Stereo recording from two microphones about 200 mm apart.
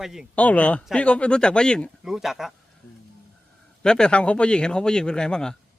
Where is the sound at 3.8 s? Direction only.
5° left (ahead or behind).